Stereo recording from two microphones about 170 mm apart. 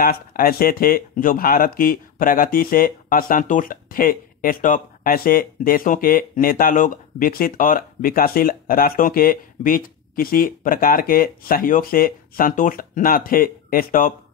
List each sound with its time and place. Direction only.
0.0 s speech: 60° left (ahead or behind)